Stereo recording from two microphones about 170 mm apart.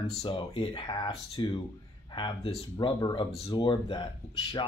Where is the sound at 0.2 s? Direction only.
30° left (ahead or behind).